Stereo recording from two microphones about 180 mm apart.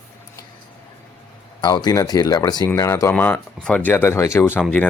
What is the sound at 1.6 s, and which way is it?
Speech, 25° left (ahead or behind).